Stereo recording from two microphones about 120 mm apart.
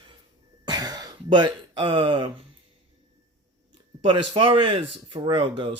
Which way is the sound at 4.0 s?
45° right (ahead or behind).